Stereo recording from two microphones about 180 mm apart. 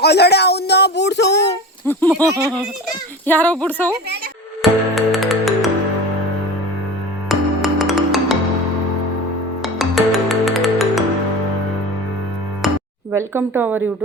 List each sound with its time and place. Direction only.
0.0 s speech: 65° left (ahead or behind)
1.9 s speech: 10° left (ahead or behind)
3.2 s speech: 10° left (ahead or behind)
4.6 s music: centre (ahead or behind)
7.3 s music: centre (ahead or behind)
9.7 s music: centre (ahead or behind)
12.6 s music: centre (ahead or behind)
13.1 s speech: 15° right (ahead or behind)